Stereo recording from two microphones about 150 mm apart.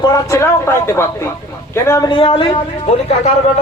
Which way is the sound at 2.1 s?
35° left (ahead or behind).